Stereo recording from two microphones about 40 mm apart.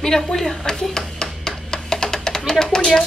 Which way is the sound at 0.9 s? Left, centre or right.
Centre.